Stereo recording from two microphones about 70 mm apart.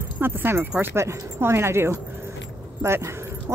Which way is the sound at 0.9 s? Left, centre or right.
Right.